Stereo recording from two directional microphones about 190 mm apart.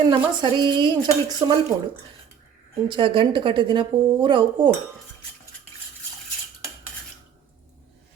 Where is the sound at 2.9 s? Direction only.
25° right (ahead or behind).